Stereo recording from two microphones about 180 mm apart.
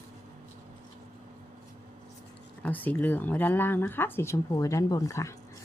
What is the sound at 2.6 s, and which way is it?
Speech, 10° left (ahead or behind).